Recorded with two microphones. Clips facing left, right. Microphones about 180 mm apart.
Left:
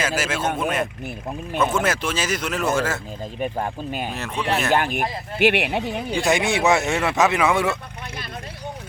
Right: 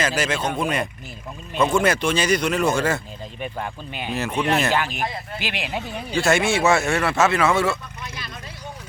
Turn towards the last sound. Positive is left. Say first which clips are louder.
# even
turn(degrees=15)  # may be behind; listen again after turning